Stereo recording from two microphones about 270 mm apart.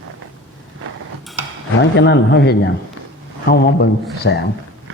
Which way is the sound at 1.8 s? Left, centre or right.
Left.